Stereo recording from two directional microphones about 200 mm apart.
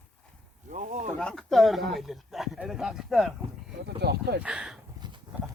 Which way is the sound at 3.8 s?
55° right (ahead or behind).